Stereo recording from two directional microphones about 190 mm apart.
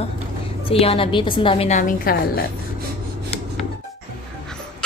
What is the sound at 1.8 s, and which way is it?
Speech, 45° left (ahead or behind).